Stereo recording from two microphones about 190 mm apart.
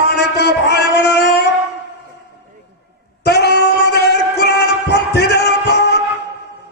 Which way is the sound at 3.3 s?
60° left (ahead or behind).